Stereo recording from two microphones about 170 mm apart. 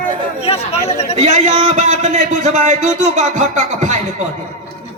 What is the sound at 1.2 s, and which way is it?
A man's voice, 45° right (ahead or behind).